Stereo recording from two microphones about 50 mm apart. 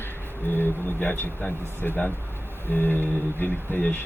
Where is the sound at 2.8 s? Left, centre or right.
Left.